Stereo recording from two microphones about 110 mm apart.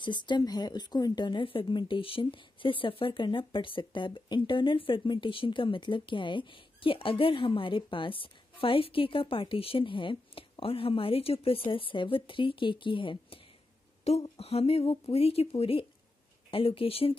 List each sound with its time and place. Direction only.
0.0 s speech: 45° left (ahead or behind)
14.0 s speech: 65° left (ahead or behind)